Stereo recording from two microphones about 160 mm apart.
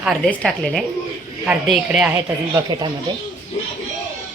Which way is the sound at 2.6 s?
20° right (ahead or behind).